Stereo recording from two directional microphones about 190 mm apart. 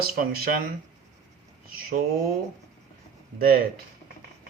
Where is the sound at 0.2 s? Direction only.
50° right (ahead or behind).